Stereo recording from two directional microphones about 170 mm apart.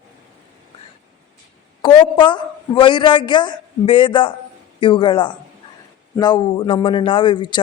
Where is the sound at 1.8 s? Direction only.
30° left (ahead or behind).